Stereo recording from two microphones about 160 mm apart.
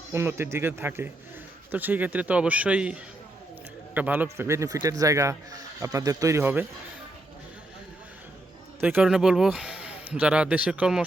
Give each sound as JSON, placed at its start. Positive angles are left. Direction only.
{"t": 0.1, "sound": "a man's voice", "side_deg": -15}
{"t": 8.8, "sound": "speech", "side_deg": -10}